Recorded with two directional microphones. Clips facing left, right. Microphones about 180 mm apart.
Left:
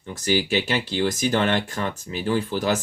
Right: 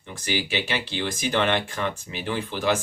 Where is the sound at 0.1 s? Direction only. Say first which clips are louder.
Left 5 dB; 45° left (ahead or behind).